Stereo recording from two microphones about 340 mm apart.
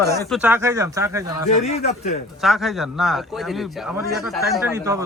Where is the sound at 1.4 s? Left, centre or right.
Centre.